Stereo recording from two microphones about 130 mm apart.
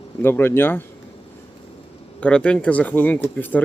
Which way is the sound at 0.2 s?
15° left (ahead or behind).